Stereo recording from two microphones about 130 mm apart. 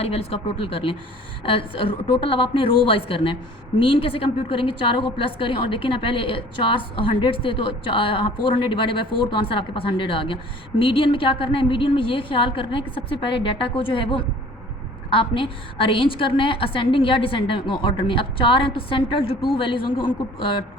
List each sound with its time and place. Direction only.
0.0 s a woman's voice: 50° left (ahead or behind)